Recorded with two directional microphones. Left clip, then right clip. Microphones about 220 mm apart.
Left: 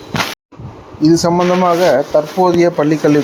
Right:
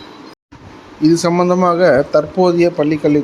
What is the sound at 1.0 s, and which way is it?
Speech, 5° left (ahead or behind).